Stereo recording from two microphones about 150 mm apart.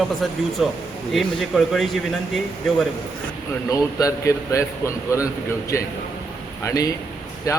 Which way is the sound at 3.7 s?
20° left (ahead or behind).